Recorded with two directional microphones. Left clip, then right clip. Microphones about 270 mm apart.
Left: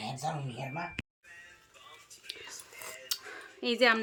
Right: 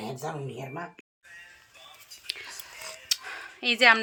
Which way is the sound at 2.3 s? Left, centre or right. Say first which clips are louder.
Right 8 dB; centre.